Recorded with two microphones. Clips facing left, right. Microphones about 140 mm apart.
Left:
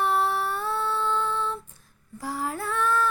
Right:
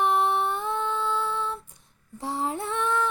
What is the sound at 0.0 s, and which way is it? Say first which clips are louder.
Humming: right 1 dB; 20° right (ahead or behind).